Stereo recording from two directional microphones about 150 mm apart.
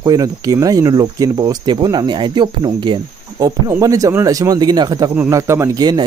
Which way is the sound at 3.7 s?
20° right (ahead or behind).